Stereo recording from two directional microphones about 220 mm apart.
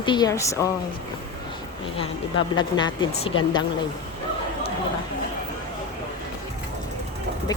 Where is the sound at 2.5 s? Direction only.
20° left (ahead or behind).